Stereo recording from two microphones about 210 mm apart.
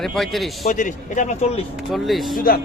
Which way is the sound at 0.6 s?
35° left (ahead or behind).